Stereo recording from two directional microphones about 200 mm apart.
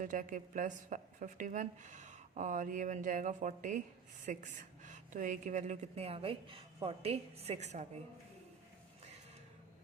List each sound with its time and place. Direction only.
0.0 s a woman's voice: 40° right (ahead or behind)